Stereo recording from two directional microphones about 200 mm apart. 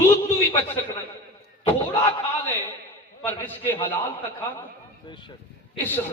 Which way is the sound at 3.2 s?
10° left (ahead or behind).